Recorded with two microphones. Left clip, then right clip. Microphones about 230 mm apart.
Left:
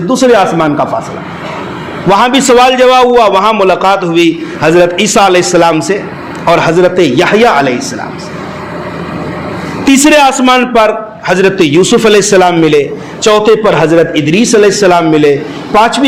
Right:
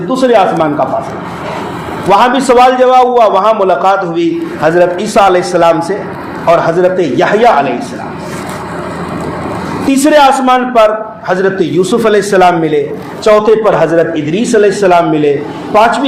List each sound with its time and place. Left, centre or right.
0.1 s a man's voice: left
2.0 s a man's voice: left
9.8 s a man's voice: left